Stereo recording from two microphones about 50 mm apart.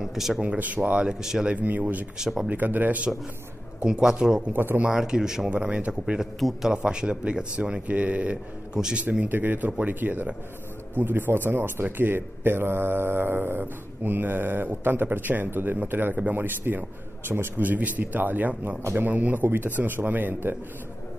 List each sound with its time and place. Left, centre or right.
0.0 s speech: centre
0.6 s a man's voice: right
1.0 s a man's voice: centre
1.5 s a man's voice: right
2.1 s a man's voice: centre
2.5 s a man's voice: right
3.8 s a man's voice: centre
5.5 s a man's voice: right
7.8 s speech: right
8.8 s a man's voice: centre
9.2 s a man's voice: right
17.6 s a man's voice: right